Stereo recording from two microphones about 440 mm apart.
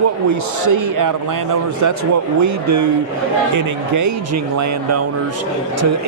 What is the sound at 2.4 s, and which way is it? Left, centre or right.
Speech, right.